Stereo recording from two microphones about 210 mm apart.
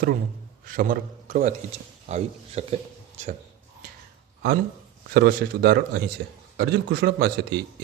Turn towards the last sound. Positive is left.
turn(degrees=-50)  # may be behind; listen again after turning